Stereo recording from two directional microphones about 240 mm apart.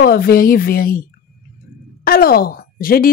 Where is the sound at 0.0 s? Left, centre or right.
Left.